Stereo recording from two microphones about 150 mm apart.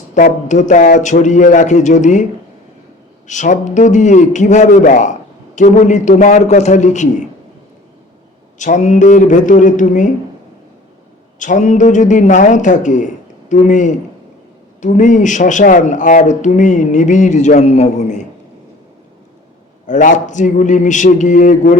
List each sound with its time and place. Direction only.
0.1 s speech: 55° left (ahead or behind)
3.2 s speech: 55° left (ahead or behind)
8.5 s speech: 55° left (ahead or behind)
11.3 s speech: 55° left (ahead or behind)
19.9 s speech: 60° left (ahead or behind)